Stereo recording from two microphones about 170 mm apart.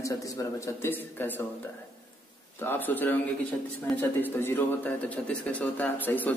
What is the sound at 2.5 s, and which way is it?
Speech, 10° left (ahead or behind).